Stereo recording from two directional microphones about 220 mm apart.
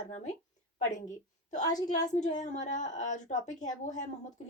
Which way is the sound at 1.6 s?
15° left (ahead or behind).